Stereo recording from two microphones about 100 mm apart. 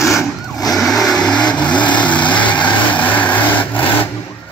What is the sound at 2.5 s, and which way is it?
Vehicle, 50° left (ahead or behind).